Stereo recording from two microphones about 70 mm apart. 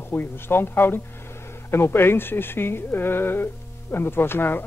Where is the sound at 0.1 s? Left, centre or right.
Left.